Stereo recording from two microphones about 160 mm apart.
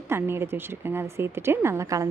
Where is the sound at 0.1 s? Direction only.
15° right (ahead or behind).